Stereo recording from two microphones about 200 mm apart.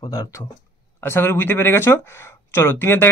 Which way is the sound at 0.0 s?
15° left (ahead or behind).